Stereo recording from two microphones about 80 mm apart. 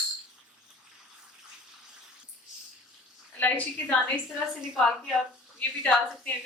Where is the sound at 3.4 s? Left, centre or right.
Centre.